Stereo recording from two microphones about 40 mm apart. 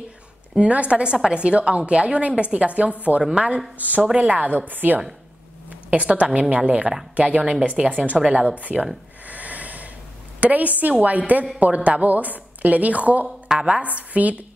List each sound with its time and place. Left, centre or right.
0.6 s a woman's voice: right
3.8 s a woman's voice: right
5.7 s a sound: right
6.0 s a woman's voice: right
9.3 s snort: right
10.4 s a woman's voice: right
13.5 s a woman's voice: centre
13.9 s a woman's voice: right